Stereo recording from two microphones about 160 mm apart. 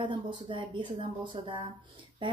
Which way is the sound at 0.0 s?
30° right (ahead or behind).